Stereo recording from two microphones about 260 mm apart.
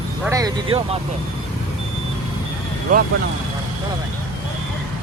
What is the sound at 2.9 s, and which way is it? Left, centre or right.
Speech, right.